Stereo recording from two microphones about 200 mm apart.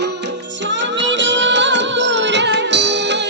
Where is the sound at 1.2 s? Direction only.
65° right (ahead or behind).